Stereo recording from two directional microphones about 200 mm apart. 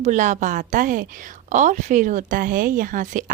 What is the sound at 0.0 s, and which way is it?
A woman's voice, 40° right (ahead or behind).